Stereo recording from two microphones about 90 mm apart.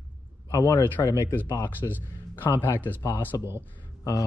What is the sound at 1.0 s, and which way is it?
Speech, 35° left (ahead or behind).